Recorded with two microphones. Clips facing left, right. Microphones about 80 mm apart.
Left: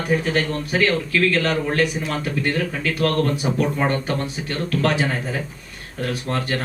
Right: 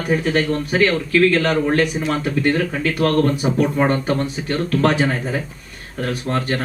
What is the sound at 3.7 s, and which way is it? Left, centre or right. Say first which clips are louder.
Speech: right 4 dB; right.